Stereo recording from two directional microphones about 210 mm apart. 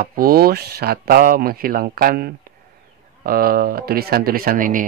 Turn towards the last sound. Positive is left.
turn(degrees=-40)  # may be behind; listen again after turning